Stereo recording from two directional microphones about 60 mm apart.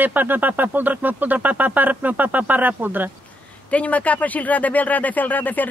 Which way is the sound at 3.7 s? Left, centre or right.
Left.